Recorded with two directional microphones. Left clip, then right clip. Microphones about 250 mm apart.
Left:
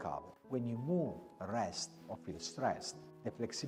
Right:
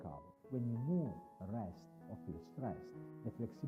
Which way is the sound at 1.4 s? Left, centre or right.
Centre.